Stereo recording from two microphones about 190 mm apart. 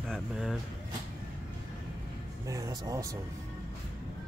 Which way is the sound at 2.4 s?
15° right (ahead or behind).